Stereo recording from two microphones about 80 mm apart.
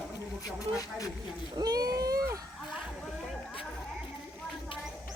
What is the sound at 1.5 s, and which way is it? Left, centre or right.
Speech, right.